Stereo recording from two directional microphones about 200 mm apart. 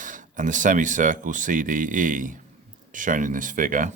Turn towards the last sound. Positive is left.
turn(degrees=-40)  # may be behind; listen again after turning